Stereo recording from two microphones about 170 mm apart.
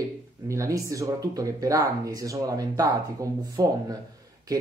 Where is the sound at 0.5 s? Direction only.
20° right (ahead or behind).